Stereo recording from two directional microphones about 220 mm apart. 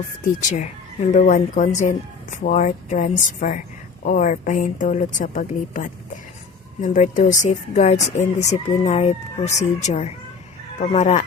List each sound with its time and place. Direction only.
0.3 s speech: 35° left (ahead or behind)